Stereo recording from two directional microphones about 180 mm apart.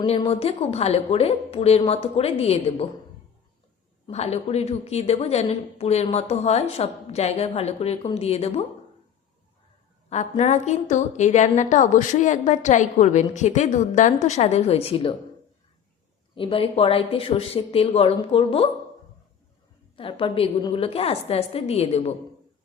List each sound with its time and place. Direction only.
0.0 s a woman's voice: 30° left (ahead or behind)
4.0 s a woman's voice: 35° left (ahead or behind)
10.1 s a woman's voice: 40° left (ahead or behind)
16.3 s a woman's voice: 30° left (ahead or behind)
20.0 s a woman's voice: 30° left (ahead or behind)